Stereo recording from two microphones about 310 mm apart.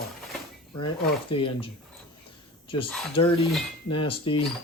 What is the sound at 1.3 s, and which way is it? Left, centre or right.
Speech, centre.